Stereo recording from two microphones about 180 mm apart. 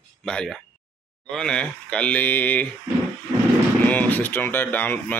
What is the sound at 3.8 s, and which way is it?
Speech, 10° left (ahead or behind).